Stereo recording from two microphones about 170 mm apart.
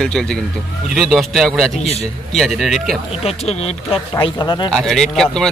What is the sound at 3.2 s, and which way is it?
Speech, 40° left (ahead or behind).